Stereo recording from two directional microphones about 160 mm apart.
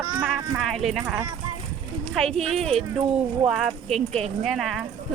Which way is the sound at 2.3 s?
40° right (ahead or behind).